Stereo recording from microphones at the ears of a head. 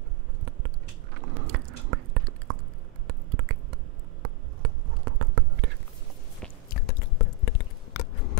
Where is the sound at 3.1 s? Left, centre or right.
Right.